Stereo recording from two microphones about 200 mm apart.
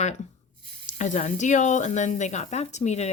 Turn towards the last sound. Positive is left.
turn(degrees=35)  # may be behind; listen again after turning